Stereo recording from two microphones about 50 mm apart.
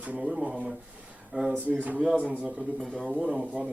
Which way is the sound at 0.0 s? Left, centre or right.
Right.